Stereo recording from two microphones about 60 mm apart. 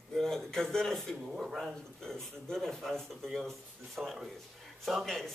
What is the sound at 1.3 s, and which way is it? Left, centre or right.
Speech, centre.